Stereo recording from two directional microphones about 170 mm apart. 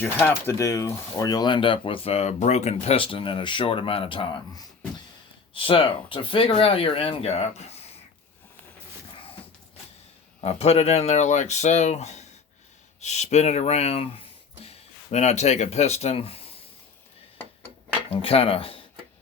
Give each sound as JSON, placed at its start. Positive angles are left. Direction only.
{"t": 0.0, "sound": "speech", "side_deg": 10}
{"t": 10.4, "sound": "speech", "side_deg": 35}
{"t": 18.1, "sound": "speech", "side_deg": 35}